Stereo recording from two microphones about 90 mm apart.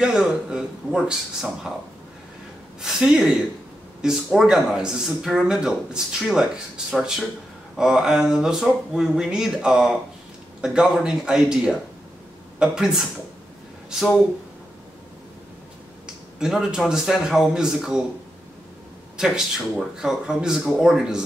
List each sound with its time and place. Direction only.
0.0 s a man's voice: 10° right (ahead or behind)
2.8 s a man's voice: 5° right (ahead or behind)
16.3 s a man's voice: 5° right (ahead or behind)
19.1 s a man's voice: 5° right (ahead or behind)